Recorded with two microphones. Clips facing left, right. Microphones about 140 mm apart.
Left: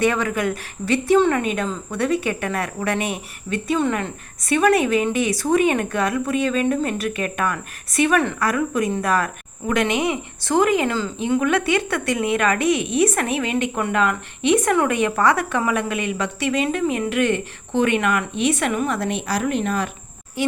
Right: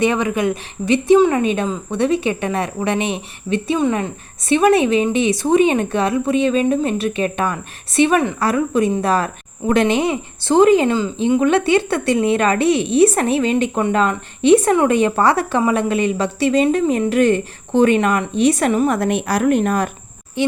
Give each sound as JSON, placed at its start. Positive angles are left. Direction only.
{"t": 0.0, "sound": "a woman's voice", "side_deg": -20}
{"t": 4.4, "sound": "a woman's voice", "side_deg": -25}
{"t": 18.9, "sound": "speech", "side_deg": -55}
{"t": 20.4, "sound": "a woman's voice", "side_deg": -25}